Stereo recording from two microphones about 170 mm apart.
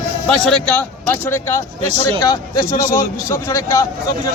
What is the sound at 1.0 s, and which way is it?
Speech, 15° left (ahead or behind).